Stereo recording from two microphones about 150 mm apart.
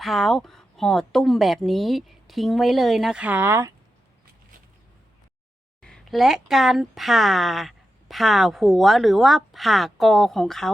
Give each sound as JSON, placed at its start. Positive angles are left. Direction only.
{"t": 0.0, "sound": "speech", "side_deg": 0}
{"t": 5.8, "sound": "speech", "side_deg": 0}